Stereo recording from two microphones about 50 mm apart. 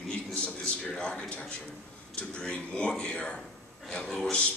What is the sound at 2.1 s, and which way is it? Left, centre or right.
A man's voice, left.